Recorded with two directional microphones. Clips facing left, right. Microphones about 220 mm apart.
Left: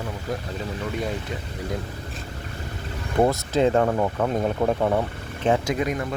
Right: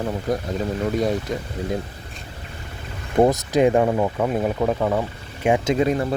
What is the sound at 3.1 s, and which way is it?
Speech, 20° right (ahead or behind).